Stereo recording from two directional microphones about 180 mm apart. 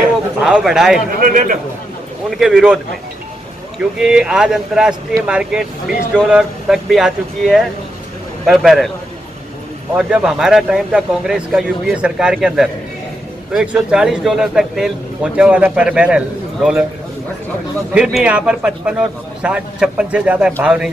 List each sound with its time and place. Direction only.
0.0 s a sound: 5° right (ahead or behind)
1.2 s a man's voice: 50° right (ahead or behind)
2.3 s speech: 5° right (ahead or behind)
4.0 s speech: 5° right (ahead or behind)
9.9 s speech: 5° right (ahead or behind)
17.9 s speech: 5° right (ahead or behind)